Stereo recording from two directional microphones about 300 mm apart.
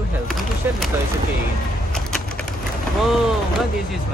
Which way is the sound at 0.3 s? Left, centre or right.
Centre.